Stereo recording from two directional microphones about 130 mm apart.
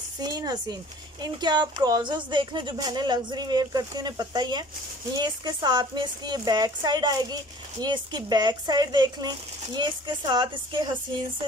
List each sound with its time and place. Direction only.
0.2 s a woman's voice: 30° right (ahead or behind)